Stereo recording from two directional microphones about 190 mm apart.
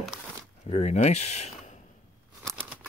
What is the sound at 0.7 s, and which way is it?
Speech, 35° left (ahead or behind).